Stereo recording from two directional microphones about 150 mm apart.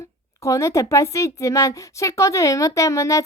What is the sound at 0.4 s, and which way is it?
A woman's voice, 20° left (ahead or behind).